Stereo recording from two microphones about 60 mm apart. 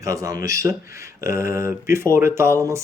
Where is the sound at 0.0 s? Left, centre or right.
Right.